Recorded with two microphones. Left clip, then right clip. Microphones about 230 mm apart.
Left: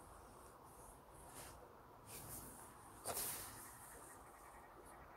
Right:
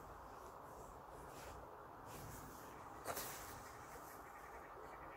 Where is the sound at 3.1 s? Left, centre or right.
Left.